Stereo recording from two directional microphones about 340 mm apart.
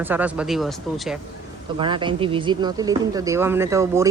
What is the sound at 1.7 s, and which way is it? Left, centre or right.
Speech, centre.